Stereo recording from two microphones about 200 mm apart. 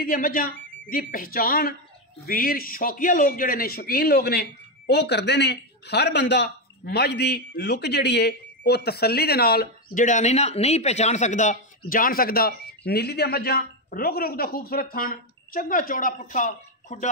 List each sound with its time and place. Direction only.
0.0 s a man's voice: 45° left (ahead or behind)